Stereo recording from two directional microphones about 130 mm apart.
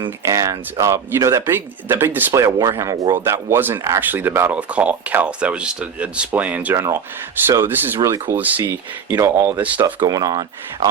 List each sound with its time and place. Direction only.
0.3 s speech: 25° right (ahead or behind)